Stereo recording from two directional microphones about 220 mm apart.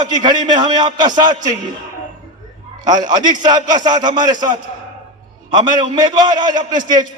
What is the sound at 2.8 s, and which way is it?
A man's voice, 20° right (ahead or behind).